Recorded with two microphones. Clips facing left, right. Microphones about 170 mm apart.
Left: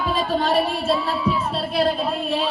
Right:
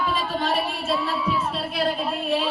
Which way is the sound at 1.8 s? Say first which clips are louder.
Left 4 dB; 35° left (ahead or behind).